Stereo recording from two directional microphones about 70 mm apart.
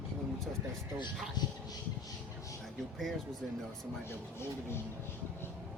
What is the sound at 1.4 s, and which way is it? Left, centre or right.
Speech, left.